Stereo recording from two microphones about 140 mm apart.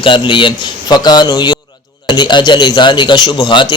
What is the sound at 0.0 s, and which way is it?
A man's voice, 35° left (ahead or behind).